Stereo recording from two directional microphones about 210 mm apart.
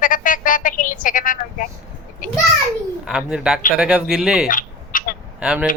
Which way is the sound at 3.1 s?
5° right (ahead or behind).